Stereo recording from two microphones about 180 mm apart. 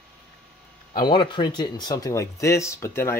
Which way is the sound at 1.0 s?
25° left (ahead or behind).